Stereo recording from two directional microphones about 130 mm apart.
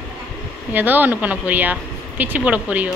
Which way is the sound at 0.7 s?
15° right (ahead or behind).